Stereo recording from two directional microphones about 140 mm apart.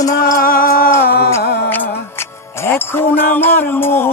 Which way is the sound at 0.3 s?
90° left.